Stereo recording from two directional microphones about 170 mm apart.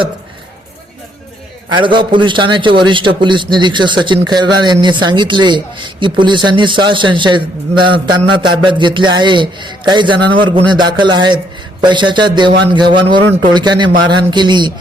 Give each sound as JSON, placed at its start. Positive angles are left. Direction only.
{"t": 1.7, "sound": "a man's voice", "side_deg": -30}